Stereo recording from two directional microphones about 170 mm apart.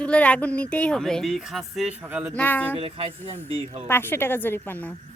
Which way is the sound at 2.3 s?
10° left (ahead or behind).